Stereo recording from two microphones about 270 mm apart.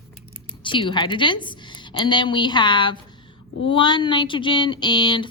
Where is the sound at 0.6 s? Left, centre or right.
Centre.